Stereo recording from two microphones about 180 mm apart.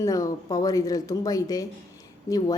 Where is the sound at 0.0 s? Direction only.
20° left (ahead or behind).